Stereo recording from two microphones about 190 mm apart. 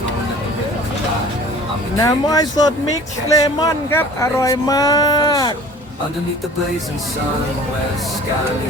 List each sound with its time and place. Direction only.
2.0 s speech: 20° left (ahead or behind)